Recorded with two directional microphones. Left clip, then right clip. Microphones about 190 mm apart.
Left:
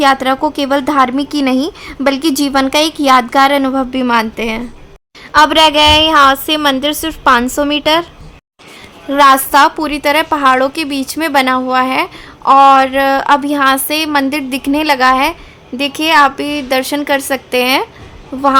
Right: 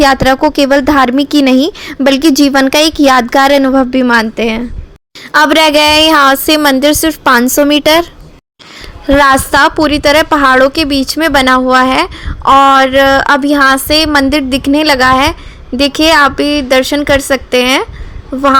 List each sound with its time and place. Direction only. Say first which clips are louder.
0.0 s a woman's voice: right 4 dB; 20° right (ahead or behind)